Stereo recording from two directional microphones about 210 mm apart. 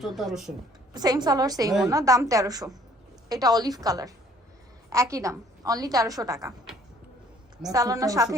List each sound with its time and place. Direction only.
0.2 s speech: centre (ahead or behind)
0.9 s a woman's voice: 20° right (ahead or behind)
7.7 s a woman's voice: 15° right (ahead or behind)